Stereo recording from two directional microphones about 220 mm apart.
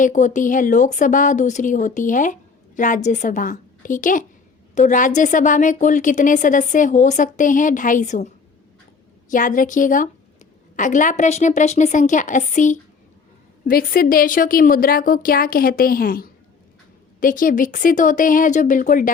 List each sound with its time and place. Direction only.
0.0 s speech: 35° left (ahead or behind)
9.3 s speech: 35° left (ahead or behind)